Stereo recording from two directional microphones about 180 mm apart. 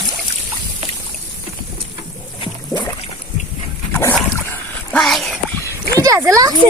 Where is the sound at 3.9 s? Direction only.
10° left (ahead or behind).